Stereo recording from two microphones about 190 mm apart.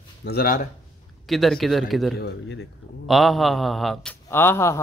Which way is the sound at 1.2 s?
Centre (ahead or behind).